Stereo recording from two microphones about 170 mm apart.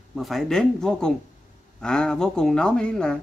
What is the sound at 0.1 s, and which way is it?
Speech, centre (ahead or behind).